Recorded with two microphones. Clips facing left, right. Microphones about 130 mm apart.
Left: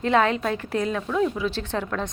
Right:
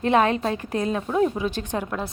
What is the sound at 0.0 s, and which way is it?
A woman's voice, 20° right (ahead or behind).